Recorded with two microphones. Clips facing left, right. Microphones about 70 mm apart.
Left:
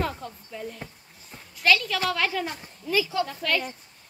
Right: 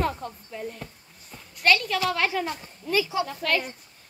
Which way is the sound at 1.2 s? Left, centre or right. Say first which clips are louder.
Even; centre.